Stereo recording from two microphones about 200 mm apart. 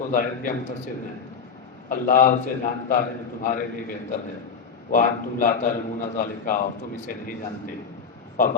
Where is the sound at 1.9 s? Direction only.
45° left (ahead or behind).